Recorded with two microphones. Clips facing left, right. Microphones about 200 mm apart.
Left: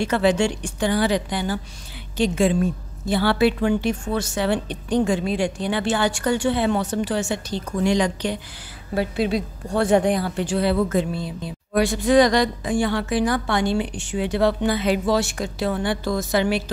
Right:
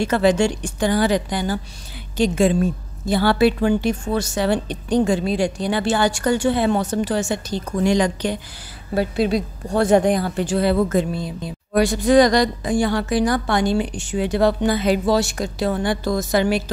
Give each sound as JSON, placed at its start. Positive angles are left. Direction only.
{"t": 0.0, "sound": "a woman's voice", "side_deg": -45}